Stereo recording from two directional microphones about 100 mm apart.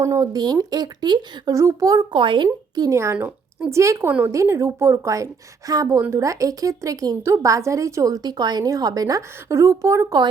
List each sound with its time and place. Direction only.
0.0 s a woman's voice: 35° right (ahead or behind)
1.5 s a woman's voice: 35° right (ahead or behind)
2.1 s speech: 55° right (ahead or behind)
2.8 s a woman's voice: 30° right (ahead or behind)
3.2 s a woman's voice: 15° right (ahead or behind)
3.7 s a woman's voice: 30° right (ahead or behind)